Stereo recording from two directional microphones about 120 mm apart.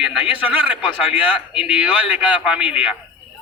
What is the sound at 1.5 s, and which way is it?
A man's voice, 5° right (ahead or behind).